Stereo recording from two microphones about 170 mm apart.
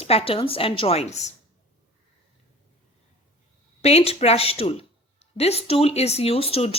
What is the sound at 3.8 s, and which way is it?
Speech, 40° left (ahead or behind).